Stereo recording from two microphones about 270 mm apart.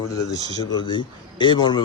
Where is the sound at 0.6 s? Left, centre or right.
Centre.